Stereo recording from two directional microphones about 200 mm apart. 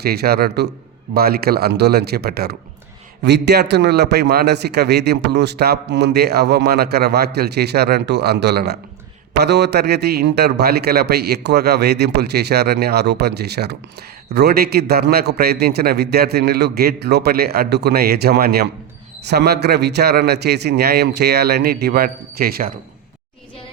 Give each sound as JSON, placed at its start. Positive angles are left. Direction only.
{"t": 0.0, "sound": "a man's voice", "side_deg": -50}